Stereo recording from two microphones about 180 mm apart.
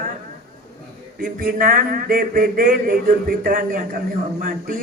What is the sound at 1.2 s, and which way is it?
A man's voice, 50° right (ahead or behind).